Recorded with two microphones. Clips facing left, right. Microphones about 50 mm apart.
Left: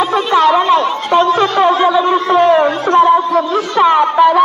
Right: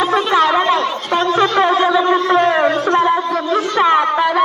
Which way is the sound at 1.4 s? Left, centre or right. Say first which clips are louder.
Left 2 dB; centre.